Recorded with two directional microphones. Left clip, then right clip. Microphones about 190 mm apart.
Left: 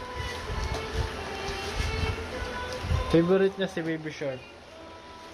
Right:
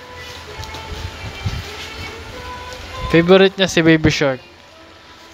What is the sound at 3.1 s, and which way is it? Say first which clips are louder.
Speech: right 12 dB; 20° right (ahead or behind).